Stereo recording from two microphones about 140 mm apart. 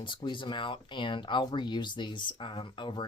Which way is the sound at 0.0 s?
35° left (ahead or behind).